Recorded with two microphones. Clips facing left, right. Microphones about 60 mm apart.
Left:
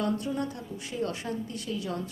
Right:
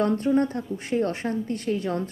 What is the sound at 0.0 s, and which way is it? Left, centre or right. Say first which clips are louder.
A woman's voice: right 8 dB; right.